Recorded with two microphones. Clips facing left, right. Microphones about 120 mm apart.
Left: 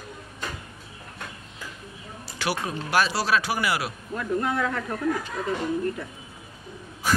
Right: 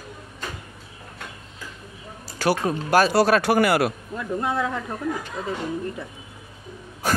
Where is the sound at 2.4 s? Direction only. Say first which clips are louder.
Right 6 dB; 45° right (ahead or behind).